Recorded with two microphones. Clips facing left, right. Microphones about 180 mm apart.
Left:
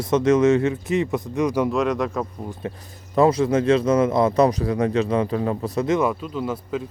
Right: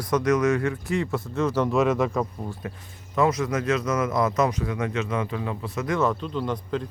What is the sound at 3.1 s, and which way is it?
Speech, 30° left (ahead or behind).